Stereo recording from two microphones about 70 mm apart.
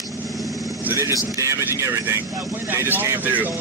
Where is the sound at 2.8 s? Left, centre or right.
Right.